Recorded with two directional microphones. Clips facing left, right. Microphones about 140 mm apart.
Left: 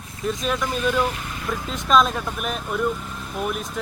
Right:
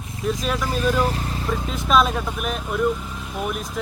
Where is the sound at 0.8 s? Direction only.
35° right (ahead or behind).